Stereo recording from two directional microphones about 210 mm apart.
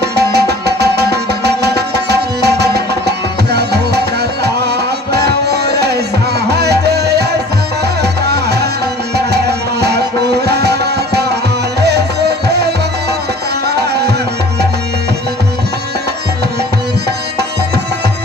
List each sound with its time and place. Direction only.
0.0 s music: 50° right (ahead or behind)
5.1 s music: 50° right (ahead or behind)
13.7 s tabla: 50° right (ahead or behind)